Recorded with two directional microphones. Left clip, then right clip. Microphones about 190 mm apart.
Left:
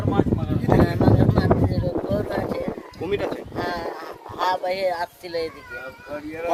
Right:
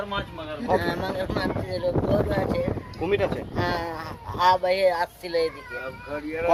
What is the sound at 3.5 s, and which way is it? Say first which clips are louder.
Speech: even; 10° left (ahead or behind).